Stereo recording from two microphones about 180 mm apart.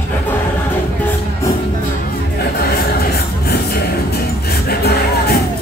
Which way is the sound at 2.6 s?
60° left (ahead or behind).